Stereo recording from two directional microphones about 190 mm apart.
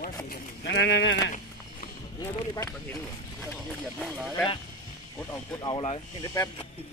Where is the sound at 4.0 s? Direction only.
Centre (ahead or behind).